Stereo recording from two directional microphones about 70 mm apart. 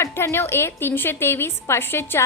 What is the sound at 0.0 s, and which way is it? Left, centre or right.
A woman's voice, left.